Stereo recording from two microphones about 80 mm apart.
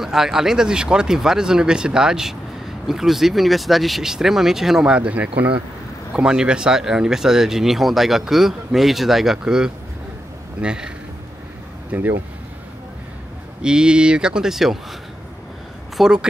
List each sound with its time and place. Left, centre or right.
0.0 s speech: centre
11.9 s speech: right
13.6 s speech: centre
16.0 s speech: centre